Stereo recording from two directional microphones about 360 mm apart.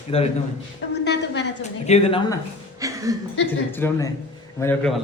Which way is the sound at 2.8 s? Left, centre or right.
Centre.